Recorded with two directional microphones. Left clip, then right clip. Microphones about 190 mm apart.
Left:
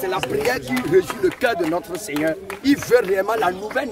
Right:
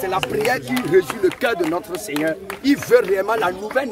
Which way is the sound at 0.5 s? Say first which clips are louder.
Right 1 dB; 15° right (ahead or behind).